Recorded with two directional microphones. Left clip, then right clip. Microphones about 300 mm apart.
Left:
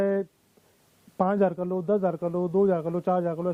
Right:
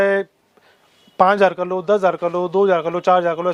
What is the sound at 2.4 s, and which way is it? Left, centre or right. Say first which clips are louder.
Speech: right 7 dB; right.